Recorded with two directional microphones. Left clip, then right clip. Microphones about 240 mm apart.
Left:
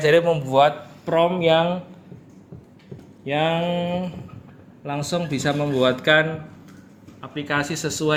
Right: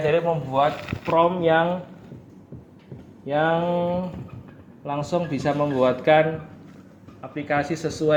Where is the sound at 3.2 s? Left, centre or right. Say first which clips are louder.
Even; left.